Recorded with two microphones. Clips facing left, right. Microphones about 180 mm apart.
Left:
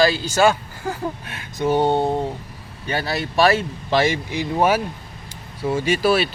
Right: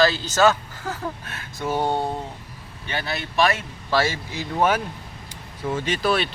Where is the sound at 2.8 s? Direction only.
35° left (ahead or behind).